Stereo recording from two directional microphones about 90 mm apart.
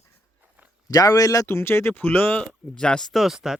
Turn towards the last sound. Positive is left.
turn(degrees=-5)  # may be behind; listen again after turning